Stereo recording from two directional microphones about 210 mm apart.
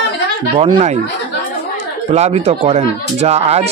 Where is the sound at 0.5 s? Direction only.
25° right (ahead or behind).